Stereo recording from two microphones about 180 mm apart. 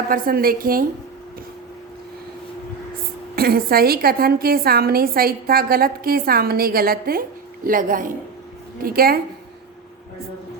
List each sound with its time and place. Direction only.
0.1 s a woman's voice: 55° right (ahead or behind)
3.3 s a woman's voice: 55° right (ahead or behind)